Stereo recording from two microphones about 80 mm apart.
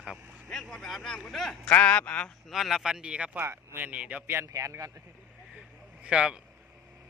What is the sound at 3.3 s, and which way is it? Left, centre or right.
Speech, right.